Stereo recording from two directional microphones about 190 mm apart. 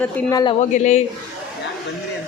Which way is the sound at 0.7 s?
40° left (ahead or behind).